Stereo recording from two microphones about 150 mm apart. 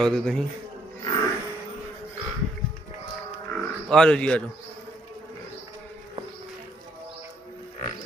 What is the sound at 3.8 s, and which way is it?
Speech, 5° left (ahead or behind).